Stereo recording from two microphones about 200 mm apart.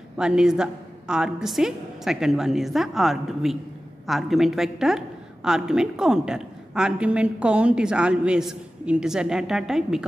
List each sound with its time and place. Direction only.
0.2 s a woman's voice: 5° right (ahead or behind)